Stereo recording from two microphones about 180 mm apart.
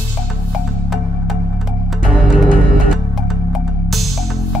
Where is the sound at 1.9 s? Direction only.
Centre (ahead or behind).